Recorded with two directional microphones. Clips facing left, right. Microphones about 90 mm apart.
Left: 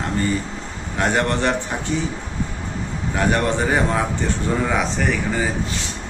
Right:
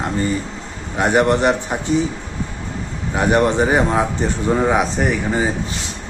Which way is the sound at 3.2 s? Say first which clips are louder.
Right 4 dB; 20° right (ahead or behind).